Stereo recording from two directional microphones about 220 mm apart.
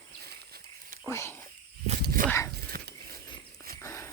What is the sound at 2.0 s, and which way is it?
Dog, 40° right (ahead or behind).